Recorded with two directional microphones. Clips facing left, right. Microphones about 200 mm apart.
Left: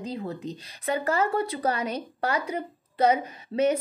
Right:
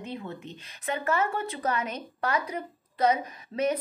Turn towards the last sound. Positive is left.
turn(degrees=30)  # may be behind; listen again after turning